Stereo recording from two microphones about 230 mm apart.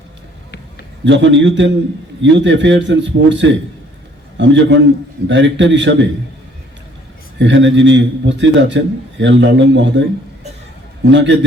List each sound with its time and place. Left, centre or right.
1.0 s a man's voice: right
7.3 s a man's voice: right